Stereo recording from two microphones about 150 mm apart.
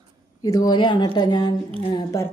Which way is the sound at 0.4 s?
25° left (ahead or behind).